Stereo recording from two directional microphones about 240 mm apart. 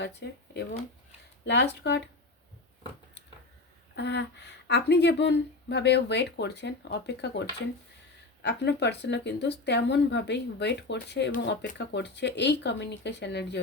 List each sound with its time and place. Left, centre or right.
0.2 s speech: left
1.5 s speech: left
3.9 s speech: left